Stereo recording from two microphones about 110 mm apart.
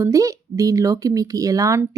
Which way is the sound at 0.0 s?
30° right (ahead or behind).